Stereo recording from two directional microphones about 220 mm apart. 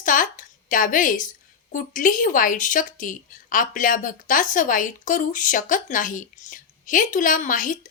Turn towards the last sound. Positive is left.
turn(degrees=35)  # may be behind; listen again after turning